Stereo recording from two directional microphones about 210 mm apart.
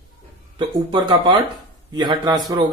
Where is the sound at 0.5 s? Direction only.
20° right (ahead or behind).